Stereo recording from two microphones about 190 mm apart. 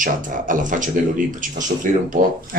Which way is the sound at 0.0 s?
45° right (ahead or behind).